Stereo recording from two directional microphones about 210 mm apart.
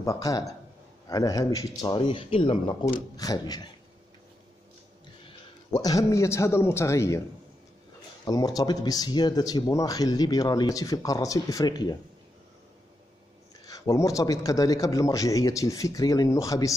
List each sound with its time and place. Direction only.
0.0 s speech: 15° left (ahead or behind)
5.2 s a man's voice: 15° left (ahead or behind)
8.3 s speech: 15° left (ahead or behind)
13.7 s speech: 15° left (ahead or behind)